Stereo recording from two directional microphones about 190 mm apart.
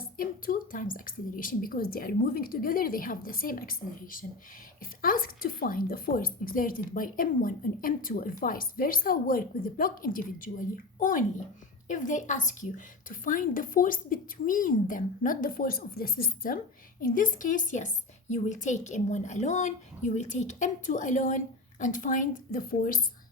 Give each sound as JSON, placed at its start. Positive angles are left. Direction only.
{"t": 0.2, "sound": "a woman's voice", "side_deg": 45}